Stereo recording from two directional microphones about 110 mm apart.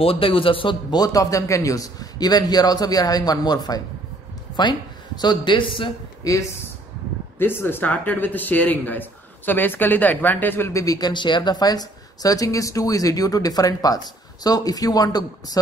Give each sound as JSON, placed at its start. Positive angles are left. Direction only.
{"t": 0.0, "sound": "a man's voice", "side_deg": 55}
{"t": 0.9, "sound": "a woman's voice", "side_deg": 35}
{"t": 7.3, "sound": "speech", "side_deg": 20}